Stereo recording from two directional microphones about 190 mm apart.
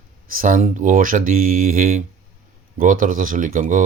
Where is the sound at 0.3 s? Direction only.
45° right (ahead or behind).